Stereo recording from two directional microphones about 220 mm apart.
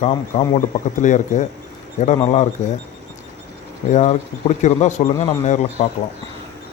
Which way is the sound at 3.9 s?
30° left (ahead or behind).